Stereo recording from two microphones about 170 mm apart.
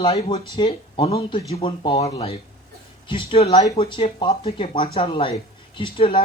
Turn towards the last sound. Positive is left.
turn(degrees=30)  # may be behind; listen again after turning